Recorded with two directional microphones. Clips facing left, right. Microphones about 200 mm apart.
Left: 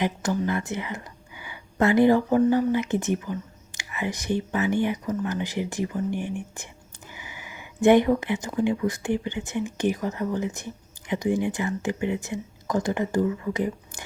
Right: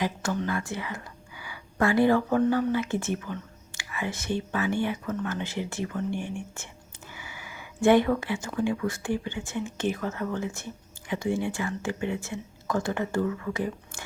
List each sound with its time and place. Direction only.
0.0 s speech: 20° left (ahead or behind)